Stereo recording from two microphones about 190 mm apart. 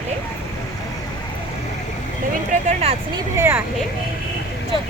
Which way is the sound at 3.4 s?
10° right (ahead or behind).